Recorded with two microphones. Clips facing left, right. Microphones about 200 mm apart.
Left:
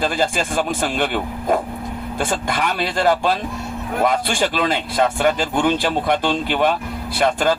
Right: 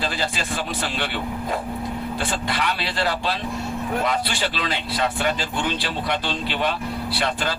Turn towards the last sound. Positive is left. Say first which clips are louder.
# left 7 dB
turn(degrees=45)  # may be behind; listen again after turning